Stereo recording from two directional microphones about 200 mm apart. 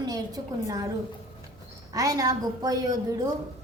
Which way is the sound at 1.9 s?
20° right (ahead or behind).